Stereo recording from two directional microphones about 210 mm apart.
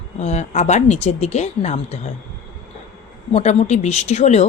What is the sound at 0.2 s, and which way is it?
Speech, 35° left (ahead or behind).